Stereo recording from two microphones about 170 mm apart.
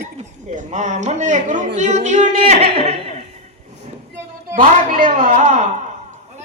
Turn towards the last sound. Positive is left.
turn(degrees=-50)  # may be behind; listen again after turning